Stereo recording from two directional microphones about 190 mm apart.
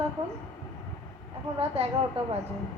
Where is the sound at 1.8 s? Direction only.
35° right (ahead or behind).